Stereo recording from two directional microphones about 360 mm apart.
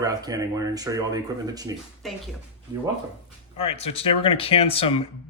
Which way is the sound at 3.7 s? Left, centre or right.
Centre.